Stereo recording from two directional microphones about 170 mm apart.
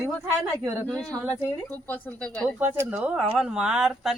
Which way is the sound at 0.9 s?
5° left (ahead or behind).